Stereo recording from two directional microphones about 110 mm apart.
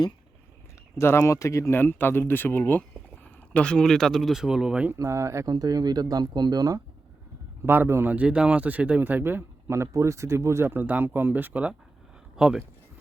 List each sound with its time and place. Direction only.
0.9 s speech: 25° left (ahead or behind); by 4.9 s 10° right (ahead or behind)
4.9 s speech: 25° right (ahead or behind)
7.6 s speech: 20° right (ahead or behind)